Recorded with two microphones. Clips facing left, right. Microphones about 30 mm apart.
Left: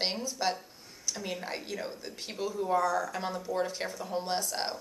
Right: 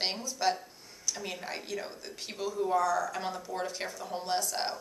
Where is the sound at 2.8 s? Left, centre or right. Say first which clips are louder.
Even; centre.